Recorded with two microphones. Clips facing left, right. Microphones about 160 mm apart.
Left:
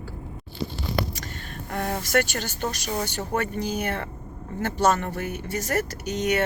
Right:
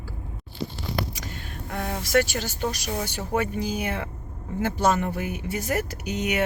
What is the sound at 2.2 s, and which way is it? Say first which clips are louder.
A woman's voice: right 1 dB; 5° right (ahead or behind).